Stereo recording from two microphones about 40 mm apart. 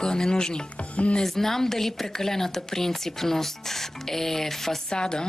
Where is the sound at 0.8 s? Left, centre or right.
Left.